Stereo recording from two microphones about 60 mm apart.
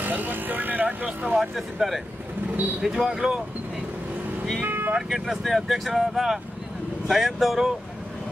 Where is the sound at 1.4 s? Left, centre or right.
Centre.